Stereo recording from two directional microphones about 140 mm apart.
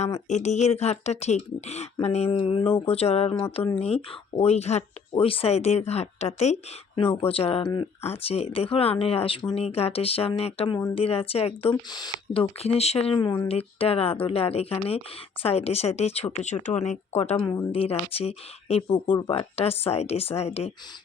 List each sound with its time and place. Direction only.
0.0 s speech: 55° left (ahead or behind)
6.9 s speech: 40° left (ahead or behind)
7.6 s speech: 30° left (ahead or behind)
8.0 s speech: 45° left (ahead or behind)
11.7 s speech: 30° left (ahead or behind); by 20.7 s 50° left (ahead or behind)